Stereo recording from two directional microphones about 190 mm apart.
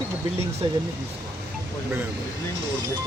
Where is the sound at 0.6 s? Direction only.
25° right (ahead or behind).